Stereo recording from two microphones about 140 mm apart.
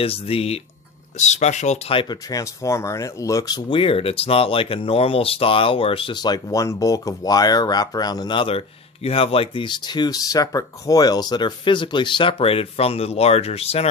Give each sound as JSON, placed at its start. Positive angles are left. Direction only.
{"t": 0.0, "sound": "speech", "side_deg": 45}
{"t": 1.1, "sound": "speech", "side_deg": 55}
{"t": 2.0, "sound": "speech", "side_deg": 30}
{"t": 3.8, "sound": "speech", "side_deg": 40}